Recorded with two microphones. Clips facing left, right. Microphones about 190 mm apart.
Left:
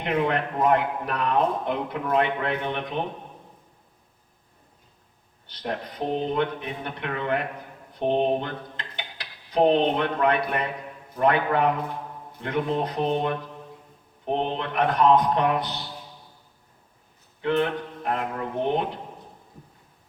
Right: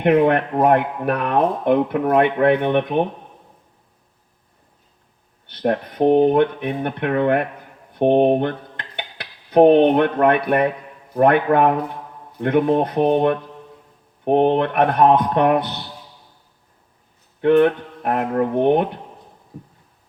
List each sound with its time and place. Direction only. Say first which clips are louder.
0.0 s speech: right 9 dB; 55° right (ahead or behind)
5.5 s speech: right 10 dB; 55° right (ahead or behind)
7.9 s cutlery: right 8 dB; 60° right (ahead or behind)
11.1 s speech: right 7 dB; 55° right (ahead or behind)
17.4 s speech: right 10 dB; 55° right (ahead or behind)